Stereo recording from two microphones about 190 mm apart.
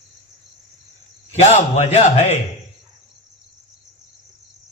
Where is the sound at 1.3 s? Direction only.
35° left (ahead or behind).